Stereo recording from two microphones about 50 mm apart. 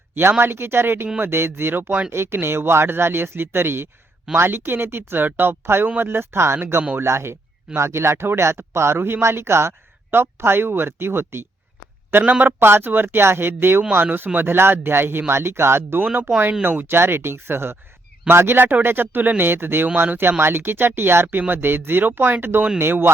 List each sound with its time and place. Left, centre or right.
0.1 s speech: right
1.9 s speech: right
2.1 s speech: right
12.2 s a man's voice: right
12.5 s speech: right
21.4 s speech: right